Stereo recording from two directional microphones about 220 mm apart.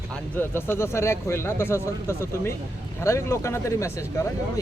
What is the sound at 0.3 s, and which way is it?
Speech, 10° left (ahead or behind).